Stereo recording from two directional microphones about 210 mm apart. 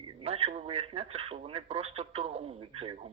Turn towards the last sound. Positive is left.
turn(degrees=-30)  # may be behind; listen again after turning